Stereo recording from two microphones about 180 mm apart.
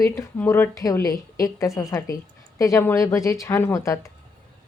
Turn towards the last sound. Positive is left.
turn(degrees=15)  # may be behind; listen again after turning